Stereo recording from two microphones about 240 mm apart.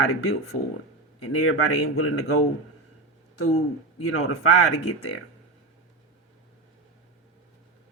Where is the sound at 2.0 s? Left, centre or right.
Left.